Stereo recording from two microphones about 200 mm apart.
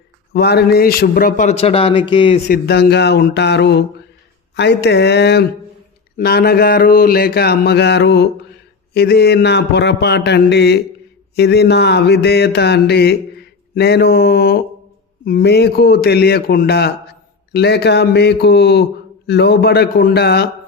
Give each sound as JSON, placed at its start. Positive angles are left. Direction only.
{"t": 0.3, "sound": "a man's voice", "side_deg": 55}
{"t": 2.5, "sound": "speech", "side_deg": 50}